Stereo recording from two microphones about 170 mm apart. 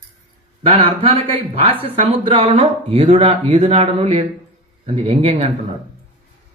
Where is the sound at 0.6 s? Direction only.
35° right (ahead or behind).